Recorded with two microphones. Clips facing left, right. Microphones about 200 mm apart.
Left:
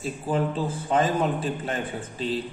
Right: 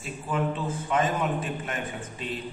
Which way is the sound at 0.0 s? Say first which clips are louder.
Left 3 dB; 35° left (ahead or behind).